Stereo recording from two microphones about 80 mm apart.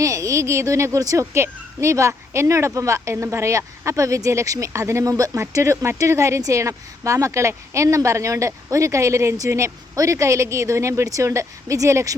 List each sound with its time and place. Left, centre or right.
0.0 s a child's voice: right